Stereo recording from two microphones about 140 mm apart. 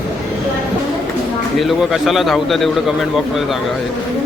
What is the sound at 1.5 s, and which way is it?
Speech, centre (ahead or behind).